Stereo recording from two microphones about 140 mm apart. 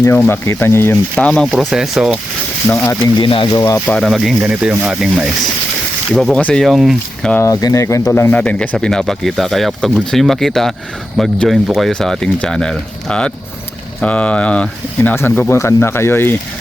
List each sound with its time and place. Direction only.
0.0 s speech: 15° left (ahead or behind); by 2.1 s 5° right (ahead or behind)
2.7 s speech: 20° left (ahead or behind)
3.2 s speech: 40° left (ahead or behind)
3.5 s speech: 20° left (ahead or behind)
3.8 s speech: 5° left (ahead or behind)
7.3 s speech: 25° left (ahead or behind)